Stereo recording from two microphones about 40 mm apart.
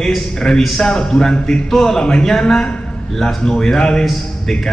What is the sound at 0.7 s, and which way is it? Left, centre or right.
A man's voice, centre.